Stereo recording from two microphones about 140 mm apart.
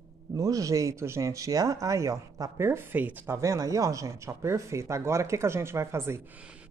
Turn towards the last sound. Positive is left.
turn(degrees=-15)  # may be behind; listen again after turning